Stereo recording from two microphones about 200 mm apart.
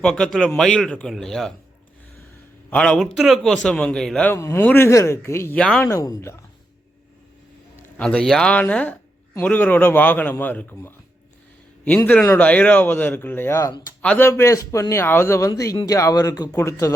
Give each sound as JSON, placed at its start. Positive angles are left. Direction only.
{"t": 0.0, "sound": "a man's voice", "side_deg": 5}
{"t": 2.6, "sound": "a man's voice", "side_deg": 5}
{"t": 5.9, "sound": "a man's voice", "side_deg": 15}
{"t": 7.8, "sound": "speech", "side_deg": 5}
{"t": 12.0, "sound": "a man's voice", "side_deg": 10}